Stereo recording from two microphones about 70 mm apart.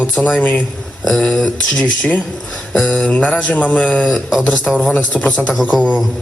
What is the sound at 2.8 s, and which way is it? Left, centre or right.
Mantra, centre.